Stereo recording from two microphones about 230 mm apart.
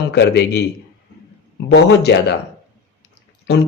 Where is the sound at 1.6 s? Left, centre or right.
Left.